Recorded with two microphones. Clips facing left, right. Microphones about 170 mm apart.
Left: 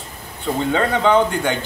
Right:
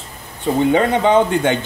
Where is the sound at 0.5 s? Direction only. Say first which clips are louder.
Right 5 dB; 15° right (ahead or behind).